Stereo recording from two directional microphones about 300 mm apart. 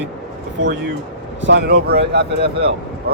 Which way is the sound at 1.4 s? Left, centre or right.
Right.